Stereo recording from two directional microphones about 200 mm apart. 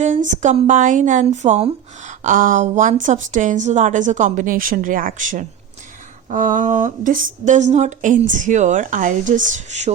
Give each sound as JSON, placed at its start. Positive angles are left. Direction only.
{"t": 0.0, "sound": "speech", "side_deg": -40}